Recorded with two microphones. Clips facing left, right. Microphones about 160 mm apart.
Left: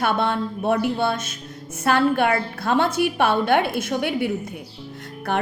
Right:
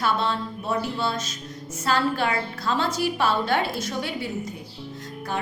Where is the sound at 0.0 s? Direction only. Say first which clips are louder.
Left 3 dB; 60° left (ahead or behind).